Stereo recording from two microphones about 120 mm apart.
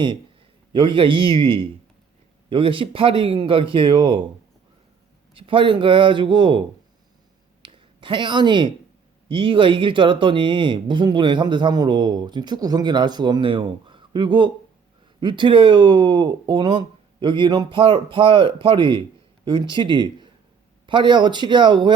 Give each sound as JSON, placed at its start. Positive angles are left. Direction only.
{"t": 0.7, "sound": "speech", "side_deg": -45}
{"t": 5.3, "sound": "speech", "side_deg": -45}
{"t": 7.6, "sound": "a sound", "side_deg": -45}
{"t": 9.3, "sound": "speech", "side_deg": -45}